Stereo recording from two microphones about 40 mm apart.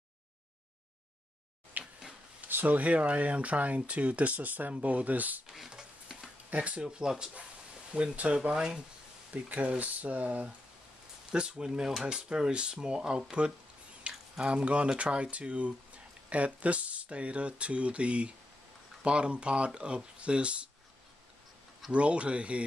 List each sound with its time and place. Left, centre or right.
1.8 s a sound: right
2.4 s speech: right
5.7 s a sound: centre
6.5 s speech: right
6.8 s speech: right
7.9 s speech: right
9.3 s speech: right
11.3 s speech: centre
14.0 s a sound: right
14.4 s speech: right
21.9 s speech: right